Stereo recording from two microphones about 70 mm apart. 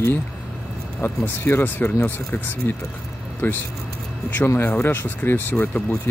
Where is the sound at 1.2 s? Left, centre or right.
Left.